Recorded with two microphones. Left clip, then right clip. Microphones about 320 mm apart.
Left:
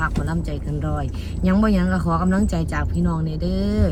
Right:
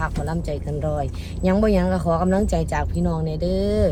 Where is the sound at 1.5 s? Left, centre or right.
Centre.